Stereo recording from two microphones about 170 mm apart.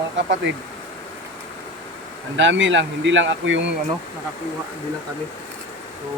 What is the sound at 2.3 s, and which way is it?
Speech, 90° right.